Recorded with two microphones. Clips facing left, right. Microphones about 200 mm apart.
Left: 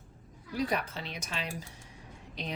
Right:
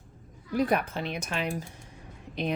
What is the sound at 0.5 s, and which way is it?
Speech, 55° right (ahead or behind).